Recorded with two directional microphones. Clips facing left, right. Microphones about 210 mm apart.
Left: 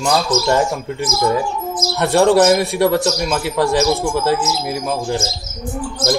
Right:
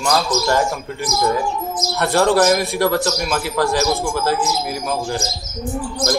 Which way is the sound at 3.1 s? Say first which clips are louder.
Left 2 dB; 20° left (ahead or behind).